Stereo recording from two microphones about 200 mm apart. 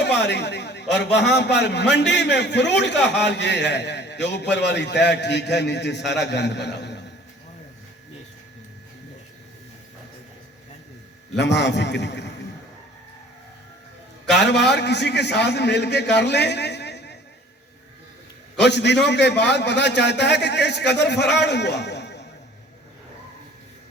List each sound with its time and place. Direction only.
0.0 s a man's voice: 60° left (ahead or behind)
11.3 s a man's voice: 60° left (ahead or behind)
14.3 s a man's voice: 60° left (ahead or behind)
18.6 s a man's voice: 60° left (ahead or behind)